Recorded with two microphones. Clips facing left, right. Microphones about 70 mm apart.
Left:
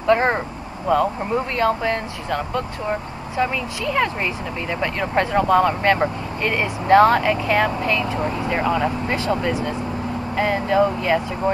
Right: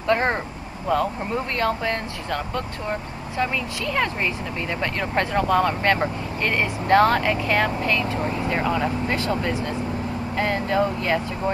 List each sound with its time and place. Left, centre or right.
0.0 s vehicle: centre
0.8 s speech: centre
8.6 s speech: centre
9.0 s speech: left